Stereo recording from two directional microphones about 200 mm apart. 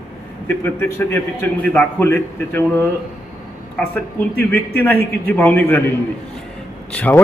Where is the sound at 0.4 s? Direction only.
10° left (ahead or behind).